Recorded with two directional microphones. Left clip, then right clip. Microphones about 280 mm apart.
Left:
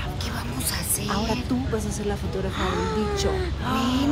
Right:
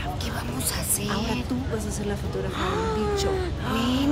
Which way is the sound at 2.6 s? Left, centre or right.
Centre.